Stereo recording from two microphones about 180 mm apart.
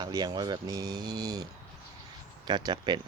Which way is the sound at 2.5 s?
25° right (ahead or behind).